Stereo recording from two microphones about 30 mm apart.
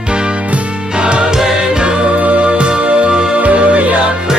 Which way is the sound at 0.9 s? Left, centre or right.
Right.